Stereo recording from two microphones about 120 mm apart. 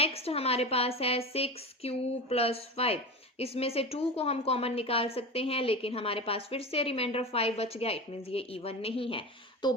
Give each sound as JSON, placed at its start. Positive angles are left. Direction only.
{"t": 0.0, "sound": "a woman's voice", "side_deg": 55}